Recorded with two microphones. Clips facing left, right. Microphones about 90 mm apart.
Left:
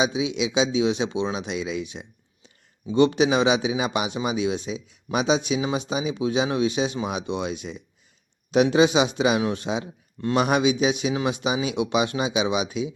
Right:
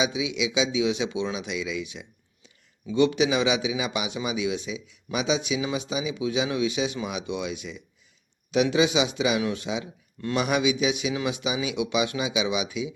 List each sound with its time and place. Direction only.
0.0 s a man's voice: 40° left (ahead or behind)
10.2 s a man's voice: 25° left (ahead or behind)
10.4 s a man's voice: 40° left (ahead or behind)